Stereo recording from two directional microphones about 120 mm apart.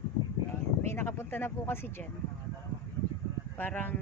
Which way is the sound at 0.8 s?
20° left (ahead or behind).